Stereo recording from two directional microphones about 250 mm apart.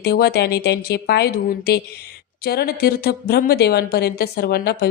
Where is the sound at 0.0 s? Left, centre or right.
Left.